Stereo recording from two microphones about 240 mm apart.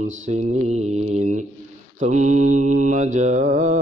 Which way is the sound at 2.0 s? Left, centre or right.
Right.